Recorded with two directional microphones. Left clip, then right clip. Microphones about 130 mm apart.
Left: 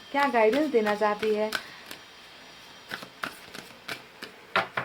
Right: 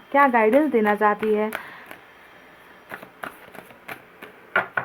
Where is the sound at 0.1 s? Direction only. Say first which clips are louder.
Right 6 dB; 40° right (ahead or behind).